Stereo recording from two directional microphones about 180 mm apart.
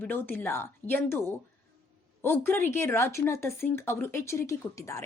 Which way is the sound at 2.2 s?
10° left (ahead or behind).